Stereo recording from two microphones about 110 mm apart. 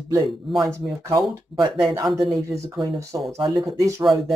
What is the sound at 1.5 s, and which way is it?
Speech, 45° right (ahead or behind).